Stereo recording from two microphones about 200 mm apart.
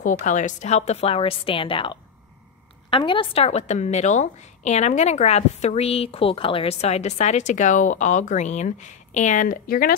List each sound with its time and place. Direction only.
0.0 s a woman's voice: 40° left (ahead or behind)